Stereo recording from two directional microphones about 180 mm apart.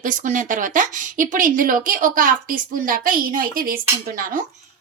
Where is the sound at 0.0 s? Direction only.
45° right (ahead or behind).